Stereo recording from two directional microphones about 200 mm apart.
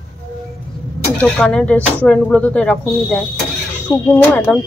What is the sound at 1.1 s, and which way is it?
Speech, 5° left (ahead or behind).